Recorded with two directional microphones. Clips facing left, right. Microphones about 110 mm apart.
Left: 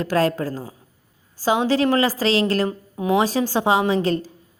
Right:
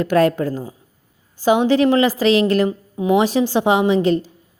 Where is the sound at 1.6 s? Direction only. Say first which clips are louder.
Right 2 dB; 35° left (ahead or behind).